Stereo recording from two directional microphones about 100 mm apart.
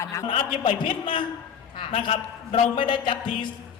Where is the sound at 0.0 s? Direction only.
30° left (ahead or behind).